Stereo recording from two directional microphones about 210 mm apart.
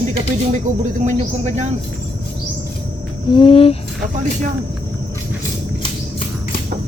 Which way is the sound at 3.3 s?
25° left (ahead or behind).